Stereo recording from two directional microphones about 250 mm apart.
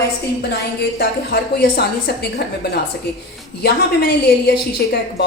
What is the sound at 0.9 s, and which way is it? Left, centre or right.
A woman's voice, left.